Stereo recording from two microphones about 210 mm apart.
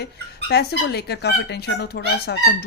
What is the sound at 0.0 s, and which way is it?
Speech, 50° left (ahead or behind).